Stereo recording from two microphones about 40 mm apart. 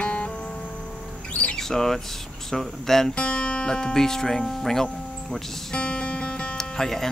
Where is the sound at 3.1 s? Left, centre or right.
Left.